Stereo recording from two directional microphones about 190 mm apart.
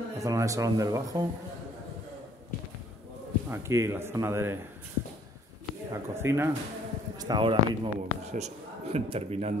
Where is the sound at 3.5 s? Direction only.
15° right (ahead or behind).